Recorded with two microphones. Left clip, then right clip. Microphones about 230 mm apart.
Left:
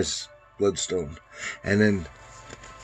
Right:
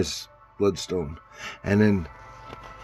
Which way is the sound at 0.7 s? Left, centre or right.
Right.